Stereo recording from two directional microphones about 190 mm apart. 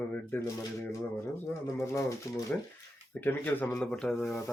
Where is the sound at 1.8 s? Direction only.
15° left (ahead or behind).